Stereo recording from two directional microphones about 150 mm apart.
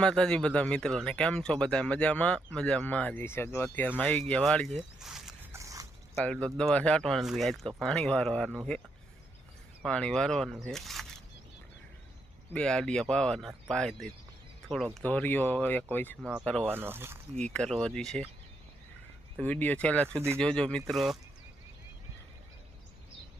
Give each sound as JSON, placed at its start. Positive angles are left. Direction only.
{"t": 0.0, "sound": "speech", "side_deg": 5}
{"t": 5.5, "sound": "a sound", "side_deg": -20}
{"t": 6.1, "sound": "speech", "side_deg": 5}
{"t": 9.8, "sound": "speech", "side_deg": 5}
{"t": 10.7, "sound": "single-lens reflex camera", "side_deg": 0}
{"t": 12.5, "sound": "speech", "side_deg": 5}
{"t": 16.2, "sound": "speech", "side_deg": 0}
{"t": 16.6, "sound": "speech", "side_deg": -15}
{"t": 17.3, "sound": "speech", "side_deg": 5}
{"t": 19.4, "sound": "speech", "side_deg": 10}
{"t": 20.1, "sound": "speech", "side_deg": -15}
{"t": 20.4, "sound": "speech", "side_deg": 5}